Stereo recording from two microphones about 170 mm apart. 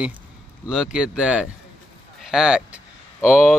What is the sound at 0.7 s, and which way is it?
Speech, 5° right (ahead or behind).